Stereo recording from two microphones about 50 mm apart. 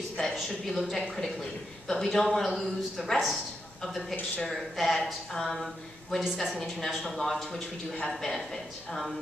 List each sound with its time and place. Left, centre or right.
0.4 s a man's voice: centre
6.6 s speech: centre